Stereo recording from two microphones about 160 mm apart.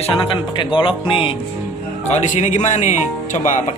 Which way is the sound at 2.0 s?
45° left (ahead or behind).